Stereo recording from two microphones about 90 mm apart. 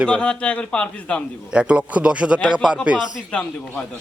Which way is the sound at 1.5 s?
15° right (ahead or behind).